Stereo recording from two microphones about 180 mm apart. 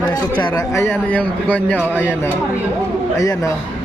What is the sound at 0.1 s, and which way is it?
A man's voice, 20° left (ahead or behind).